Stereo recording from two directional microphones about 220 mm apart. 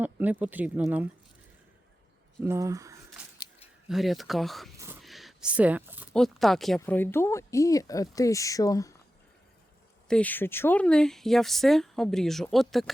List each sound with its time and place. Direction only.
0.0 s speech: 10° right (ahead or behind)
2.4 s speech: 15° right (ahead or behind)
3.3 s a sound: 20° left (ahead or behind)
3.8 s speech: centre (ahead or behind); by 9.0 s 15° left (ahead or behind)
10.1 s speech: 5° left (ahead or behind)